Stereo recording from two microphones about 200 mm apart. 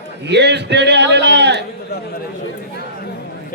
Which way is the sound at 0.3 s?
60° right (ahead or behind).